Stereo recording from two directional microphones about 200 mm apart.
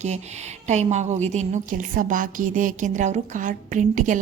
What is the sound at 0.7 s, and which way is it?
A woman's voice, 35° right (ahead or behind).